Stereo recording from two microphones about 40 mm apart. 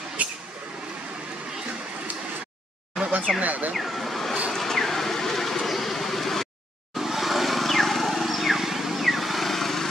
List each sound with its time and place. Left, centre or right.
0.2 s a sound: right
3.4 s speech: right
3.7 s vehicle: centre
7.0 s vehicle: centre